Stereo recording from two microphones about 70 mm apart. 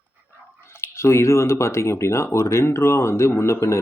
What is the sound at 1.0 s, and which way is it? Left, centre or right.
Speech, left.